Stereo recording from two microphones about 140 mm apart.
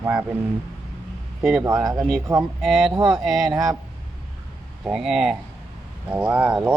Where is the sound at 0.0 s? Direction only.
15° right (ahead or behind).